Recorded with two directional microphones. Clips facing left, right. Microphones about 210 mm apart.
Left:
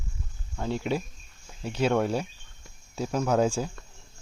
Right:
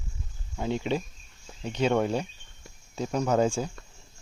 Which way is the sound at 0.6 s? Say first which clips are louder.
Even; centre (ahead or behind).